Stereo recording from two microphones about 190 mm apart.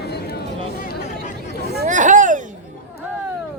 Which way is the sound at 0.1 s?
55° left (ahead or behind).